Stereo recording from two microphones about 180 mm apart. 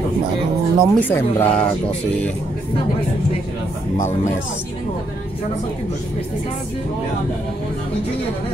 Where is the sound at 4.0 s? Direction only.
40° left (ahead or behind).